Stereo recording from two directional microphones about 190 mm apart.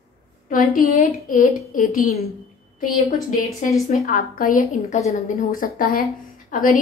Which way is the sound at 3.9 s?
45° left (ahead or behind).